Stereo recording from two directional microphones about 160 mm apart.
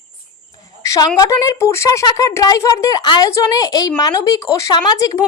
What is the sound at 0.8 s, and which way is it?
A woman's voice, 20° left (ahead or behind).